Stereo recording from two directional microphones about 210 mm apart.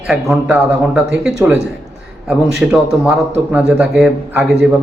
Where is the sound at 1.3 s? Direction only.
15° right (ahead or behind).